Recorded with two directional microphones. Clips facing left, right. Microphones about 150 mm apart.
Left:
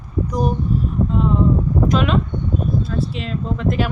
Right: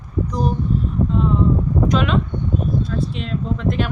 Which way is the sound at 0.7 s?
10° left (ahead or behind).